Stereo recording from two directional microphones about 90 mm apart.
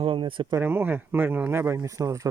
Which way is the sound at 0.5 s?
25° right (ahead or behind).